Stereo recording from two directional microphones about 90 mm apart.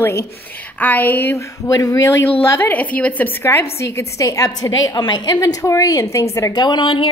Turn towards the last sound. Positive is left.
turn(degrees=65)  # may be behind; listen again after turning